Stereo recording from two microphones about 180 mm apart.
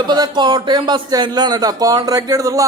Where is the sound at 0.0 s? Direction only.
25° right (ahead or behind).